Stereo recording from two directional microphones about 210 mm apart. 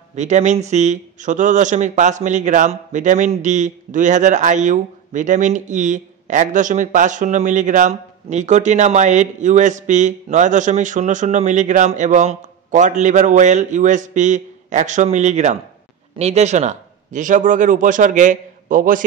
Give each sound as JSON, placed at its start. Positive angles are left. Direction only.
{"t": 0.1, "sound": "speech", "side_deg": -35}